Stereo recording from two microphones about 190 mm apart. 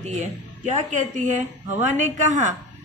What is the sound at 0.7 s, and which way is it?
A woman's voice, 40° right (ahead or behind).